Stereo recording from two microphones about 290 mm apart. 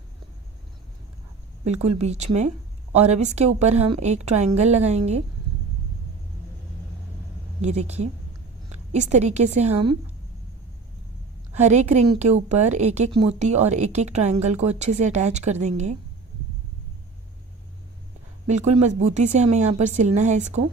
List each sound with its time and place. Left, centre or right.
1.6 s a woman's voice: right
7.6 s a woman's voice: right
11.5 s a woman's voice: right
18.4 s a woman's voice: right